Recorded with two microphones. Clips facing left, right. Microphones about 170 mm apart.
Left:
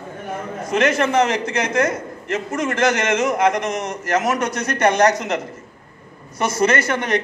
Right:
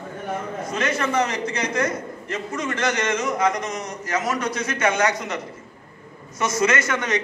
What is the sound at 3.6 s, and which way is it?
Speech, 85° left.